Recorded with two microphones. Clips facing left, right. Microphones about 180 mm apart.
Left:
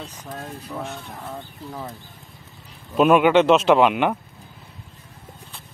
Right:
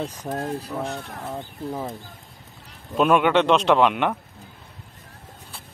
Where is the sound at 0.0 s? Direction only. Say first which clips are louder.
Right 7 dB; 50° right (ahead or behind).